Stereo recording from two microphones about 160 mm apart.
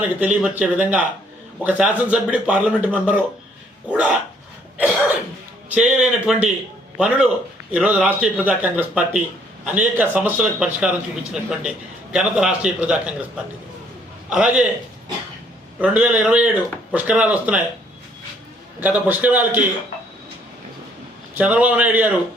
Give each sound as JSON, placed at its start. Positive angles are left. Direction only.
{"t": 0.0, "sound": "a man's voice", "side_deg": -10}
{"t": 5.7, "sound": "a man's voice", "side_deg": -5}
{"t": 15.8, "sound": "a man's voice", "side_deg": -10}
{"t": 18.8, "sound": "a man's voice", "side_deg": -10}
{"t": 21.3, "sound": "a man's voice", "side_deg": -10}